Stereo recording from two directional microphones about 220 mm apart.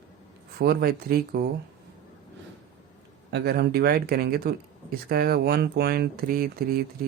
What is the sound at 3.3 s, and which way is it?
Speech, 45° right (ahead or behind).